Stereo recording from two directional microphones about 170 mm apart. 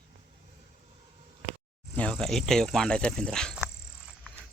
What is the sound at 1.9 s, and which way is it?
Insect, 5° left (ahead or behind).